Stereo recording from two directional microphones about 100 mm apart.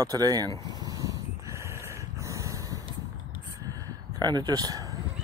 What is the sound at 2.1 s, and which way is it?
Dog, 30° right (ahead or behind).